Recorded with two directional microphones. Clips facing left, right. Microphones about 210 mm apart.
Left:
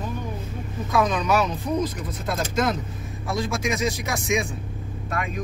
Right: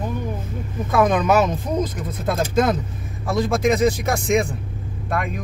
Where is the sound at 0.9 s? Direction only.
55° right (ahead or behind).